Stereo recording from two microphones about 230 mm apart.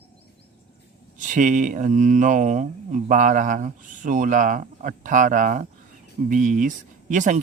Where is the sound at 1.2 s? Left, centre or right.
Right.